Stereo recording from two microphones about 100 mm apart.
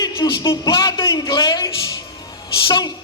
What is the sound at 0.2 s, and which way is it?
Music, 30° left (ahead or behind).